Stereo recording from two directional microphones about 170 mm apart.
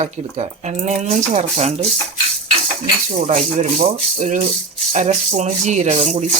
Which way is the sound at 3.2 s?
40° right (ahead or behind).